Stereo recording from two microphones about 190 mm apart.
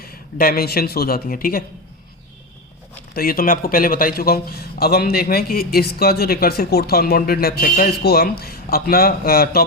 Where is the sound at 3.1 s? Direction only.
50° left (ahead or behind).